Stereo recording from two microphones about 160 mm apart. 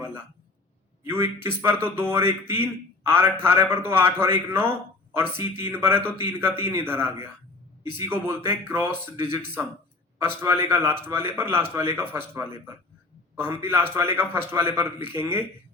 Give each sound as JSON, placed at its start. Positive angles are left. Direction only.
{"t": 1.0, "sound": "a man's voice", "side_deg": -15}